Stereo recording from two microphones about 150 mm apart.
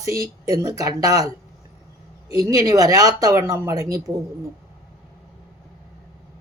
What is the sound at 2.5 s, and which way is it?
Speech, 25° right (ahead or behind).